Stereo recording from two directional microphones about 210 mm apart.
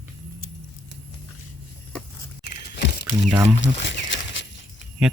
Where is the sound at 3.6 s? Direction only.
60° left (ahead or behind).